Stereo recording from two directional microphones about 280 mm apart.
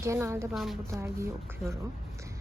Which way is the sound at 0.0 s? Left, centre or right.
Centre.